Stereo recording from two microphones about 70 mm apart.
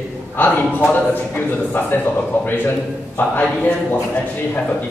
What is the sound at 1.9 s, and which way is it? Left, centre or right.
A man's voice, left.